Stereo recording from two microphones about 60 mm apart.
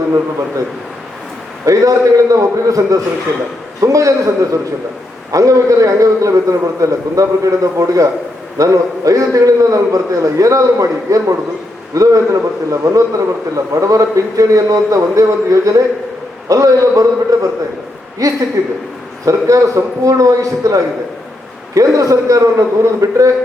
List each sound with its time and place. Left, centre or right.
1.6 s a man's voice: right